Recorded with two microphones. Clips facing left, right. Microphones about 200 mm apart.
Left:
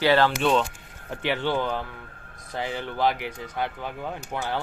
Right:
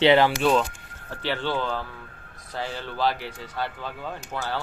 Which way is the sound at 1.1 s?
15° left (ahead or behind).